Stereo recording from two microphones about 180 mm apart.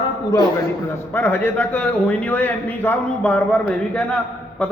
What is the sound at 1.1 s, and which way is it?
A man's voice, 10° left (ahead or behind).